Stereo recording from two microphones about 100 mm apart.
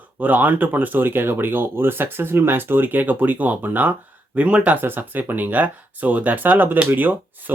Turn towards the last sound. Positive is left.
turn(degrees=-20)  # may be behind; listen again after turning